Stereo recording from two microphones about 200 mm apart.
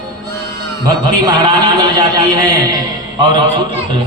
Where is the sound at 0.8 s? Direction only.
20° right (ahead or behind).